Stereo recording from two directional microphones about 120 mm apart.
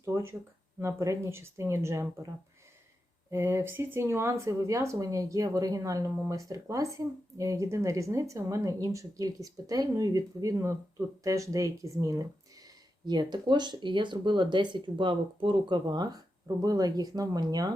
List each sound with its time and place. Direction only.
0.0 s a sound: 25° right (ahead or behind)
0.8 s speech: 25° right (ahead or behind)
3.3 s speech: 20° right (ahead or behind)